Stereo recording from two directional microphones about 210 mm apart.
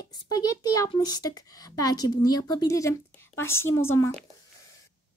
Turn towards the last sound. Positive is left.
turn(degrees=10)  # may be behind; listen again after turning